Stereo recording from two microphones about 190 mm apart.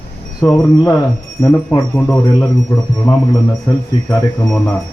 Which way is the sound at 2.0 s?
5° left (ahead or behind).